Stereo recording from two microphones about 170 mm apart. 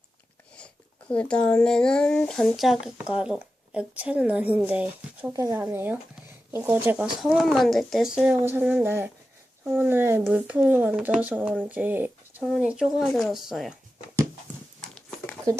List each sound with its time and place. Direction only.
0.5 s speech: 5° left (ahead or behind)
5.3 s speech: 20° right (ahead or behind); by 13.7 s centre (ahead or behind)
14.8 s a sound: 5° left (ahead or behind)